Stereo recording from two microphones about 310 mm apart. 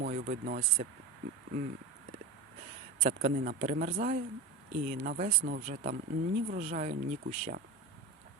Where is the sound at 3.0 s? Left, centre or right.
Right.